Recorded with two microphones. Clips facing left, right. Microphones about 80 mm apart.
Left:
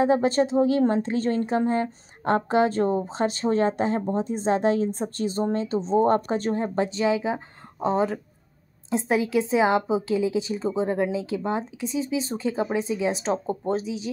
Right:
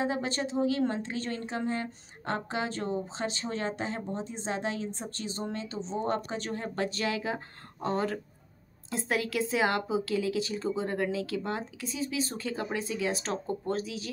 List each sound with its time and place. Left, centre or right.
0.0 s speech: left
6.5 s speech: left